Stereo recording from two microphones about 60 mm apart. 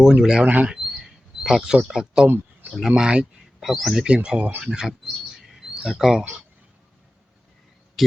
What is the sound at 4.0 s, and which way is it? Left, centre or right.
Speech, centre.